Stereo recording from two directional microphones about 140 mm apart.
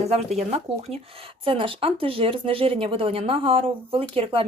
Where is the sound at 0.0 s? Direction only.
50° right (ahead or behind).